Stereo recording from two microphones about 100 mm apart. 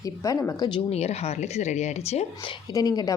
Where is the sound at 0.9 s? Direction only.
90° left.